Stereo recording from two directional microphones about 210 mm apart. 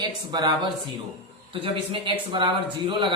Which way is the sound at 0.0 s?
20° right (ahead or behind).